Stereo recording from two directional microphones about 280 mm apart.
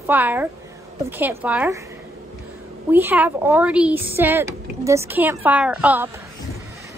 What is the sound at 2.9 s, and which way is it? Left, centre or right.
A woman's voice, centre.